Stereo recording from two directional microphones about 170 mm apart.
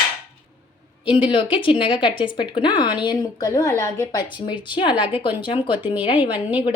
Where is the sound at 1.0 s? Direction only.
30° left (ahead or behind).